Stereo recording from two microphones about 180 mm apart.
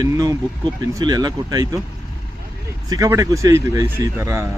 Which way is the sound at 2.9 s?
20° right (ahead or behind).